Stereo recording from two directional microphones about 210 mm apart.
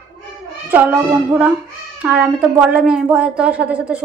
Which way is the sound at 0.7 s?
10° right (ahead or behind).